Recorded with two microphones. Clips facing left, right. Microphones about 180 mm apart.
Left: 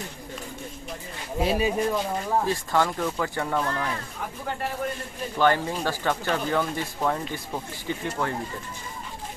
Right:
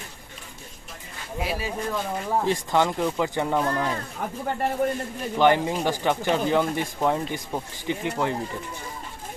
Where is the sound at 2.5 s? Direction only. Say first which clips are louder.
Right 2 dB; 20° right (ahead or behind).